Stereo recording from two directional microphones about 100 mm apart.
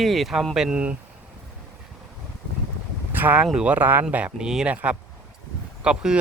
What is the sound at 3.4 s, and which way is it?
Speech, 10° right (ahead or behind).